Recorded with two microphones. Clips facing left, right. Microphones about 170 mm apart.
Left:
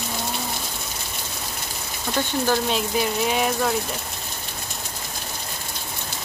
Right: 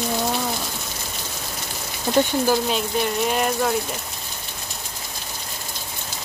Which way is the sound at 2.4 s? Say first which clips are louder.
Right 1 dB; centre (ahead or behind).